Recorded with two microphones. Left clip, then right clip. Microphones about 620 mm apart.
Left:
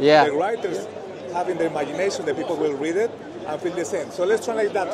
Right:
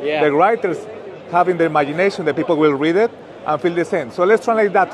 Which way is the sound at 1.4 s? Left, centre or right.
Right.